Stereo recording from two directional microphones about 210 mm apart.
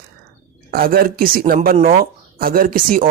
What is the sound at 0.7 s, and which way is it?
Speech, 45° right (ahead or behind).